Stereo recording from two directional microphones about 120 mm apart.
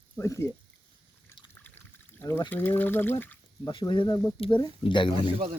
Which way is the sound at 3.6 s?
45° left (ahead or behind).